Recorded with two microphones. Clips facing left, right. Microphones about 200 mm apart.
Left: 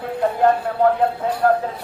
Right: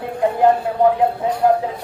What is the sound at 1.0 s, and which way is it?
Speech, 15° right (ahead or behind).